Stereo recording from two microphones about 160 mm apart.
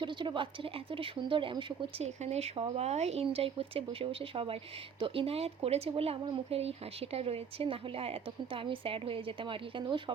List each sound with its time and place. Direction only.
0.0 s speech: 30° right (ahead or behind)
2.0 s speech: 45° right (ahead or behind)